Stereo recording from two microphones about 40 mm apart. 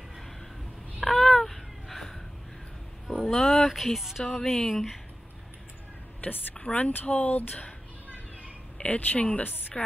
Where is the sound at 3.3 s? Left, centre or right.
Centre.